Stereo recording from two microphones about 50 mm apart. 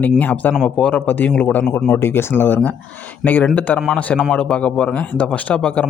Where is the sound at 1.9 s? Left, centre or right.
Left.